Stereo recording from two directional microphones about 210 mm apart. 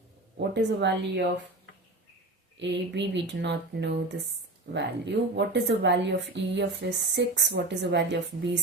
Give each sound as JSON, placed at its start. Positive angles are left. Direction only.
{"t": 0.3, "sound": "a woman's voice", "side_deg": -55}
{"t": 2.6, "sound": "a woman's voice", "side_deg": -55}